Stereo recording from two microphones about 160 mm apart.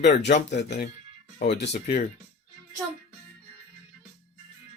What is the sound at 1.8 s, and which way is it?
Speech, 45° left (ahead or behind).